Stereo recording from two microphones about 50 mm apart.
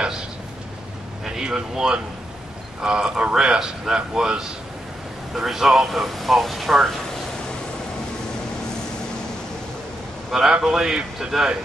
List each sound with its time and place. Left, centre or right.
1.2 s a man's voice: centre
10.3 s a man's voice: centre